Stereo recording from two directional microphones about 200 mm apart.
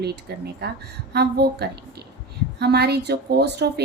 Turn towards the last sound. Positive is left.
turn(degrees=-55)  # may be behind; listen again after turning